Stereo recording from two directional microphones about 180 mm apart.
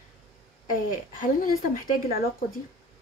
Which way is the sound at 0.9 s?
50° left (ahead or behind).